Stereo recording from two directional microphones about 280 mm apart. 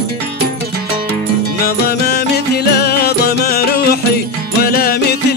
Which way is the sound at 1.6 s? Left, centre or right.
Left.